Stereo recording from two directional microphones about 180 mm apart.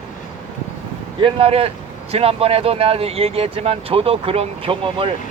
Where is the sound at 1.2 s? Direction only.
30° right (ahead or behind).